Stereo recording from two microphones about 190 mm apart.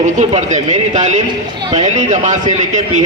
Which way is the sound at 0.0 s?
40° right (ahead or behind).